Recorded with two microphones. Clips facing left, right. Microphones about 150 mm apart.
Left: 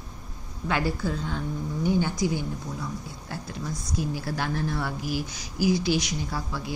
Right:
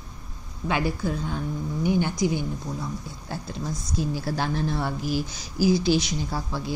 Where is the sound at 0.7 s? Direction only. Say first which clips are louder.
Right 1 dB; 15° right (ahead or behind).